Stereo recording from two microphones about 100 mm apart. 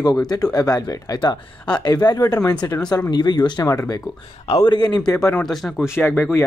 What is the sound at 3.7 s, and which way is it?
Speech, 30° left (ahead or behind).